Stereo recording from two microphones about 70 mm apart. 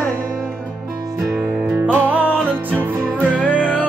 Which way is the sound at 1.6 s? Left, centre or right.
Right.